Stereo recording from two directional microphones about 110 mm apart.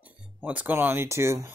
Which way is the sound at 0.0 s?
15° right (ahead or behind).